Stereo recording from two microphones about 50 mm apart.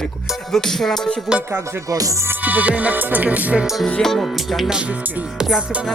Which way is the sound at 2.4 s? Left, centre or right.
Right.